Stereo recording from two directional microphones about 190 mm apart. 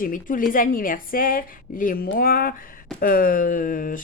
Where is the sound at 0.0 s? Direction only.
45° left (ahead or behind).